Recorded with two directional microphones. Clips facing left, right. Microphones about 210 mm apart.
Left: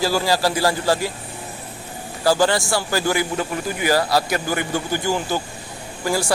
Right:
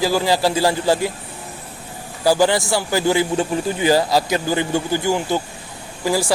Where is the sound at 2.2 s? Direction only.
15° right (ahead or behind).